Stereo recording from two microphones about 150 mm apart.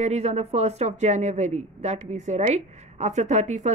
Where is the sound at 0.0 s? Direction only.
45° right (ahead or behind).